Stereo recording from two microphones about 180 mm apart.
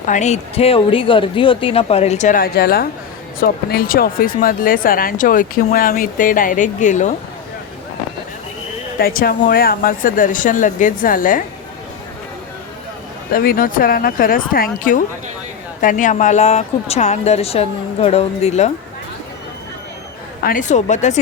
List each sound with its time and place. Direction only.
0.0 s speech: 40° left (ahead or behind)
9.0 s speech: 55° left (ahead or behind)
13.3 s speech: 50° left (ahead or behind)
20.4 s speech: 50° left (ahead or behind)